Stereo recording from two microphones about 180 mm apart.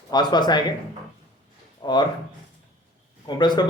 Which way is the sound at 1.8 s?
25° left (ahead or behind).